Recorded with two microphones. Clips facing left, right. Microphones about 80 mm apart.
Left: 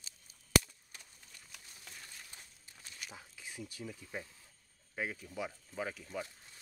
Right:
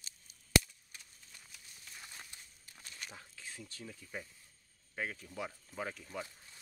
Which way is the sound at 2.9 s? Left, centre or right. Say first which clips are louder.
Even; centre.